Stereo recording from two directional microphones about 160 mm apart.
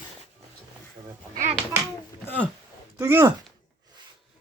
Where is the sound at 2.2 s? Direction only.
10° left (ahead or behind).